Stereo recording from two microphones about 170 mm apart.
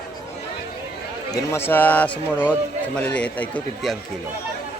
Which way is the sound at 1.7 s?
10° left (ahead or behind).